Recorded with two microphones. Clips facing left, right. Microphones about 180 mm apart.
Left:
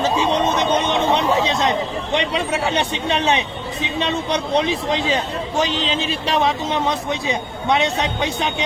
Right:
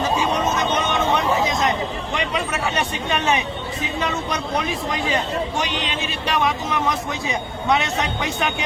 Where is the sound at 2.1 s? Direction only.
30° left (ahead or behind).